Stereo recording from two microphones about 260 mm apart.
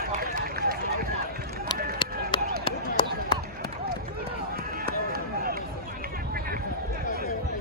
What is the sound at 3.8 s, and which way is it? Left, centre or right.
Run, right.